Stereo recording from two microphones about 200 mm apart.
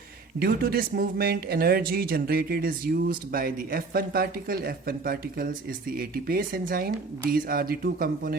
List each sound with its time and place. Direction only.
0.3 s speech: 50° right (ahead or behind)